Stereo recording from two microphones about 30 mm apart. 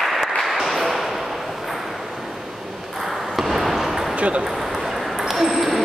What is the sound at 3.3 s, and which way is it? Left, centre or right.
Basketball bounce, centre.